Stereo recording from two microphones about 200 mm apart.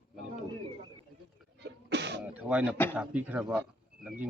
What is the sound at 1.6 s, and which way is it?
Throat clearing, 60° right (ahead or behind).